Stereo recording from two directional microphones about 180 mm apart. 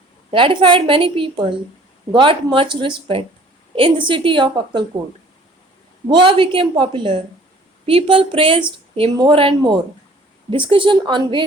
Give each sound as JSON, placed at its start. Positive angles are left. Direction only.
{"t": 0.3, "sound": "a woman's voice", "side_deg": -30}
{"t": 6.1, "sound": "a woman's voice", "side_deg": -25}